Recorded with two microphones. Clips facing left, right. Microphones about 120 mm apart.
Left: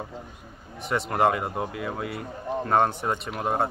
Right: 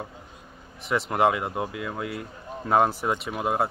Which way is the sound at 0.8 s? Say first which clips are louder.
Even; centre (ahead or behind).